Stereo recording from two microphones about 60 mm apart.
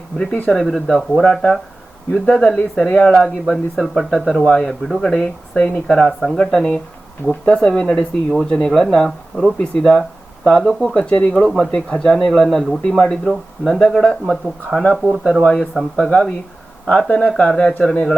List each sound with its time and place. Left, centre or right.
0.5 s speech: centre
1.2 s speech: centre
3.2 s speech: centre
4.4 s speech: centre
10.9 s speech: centre
11.4 s speech: centre
15.0 s speech: centre
15.4 s speech: centre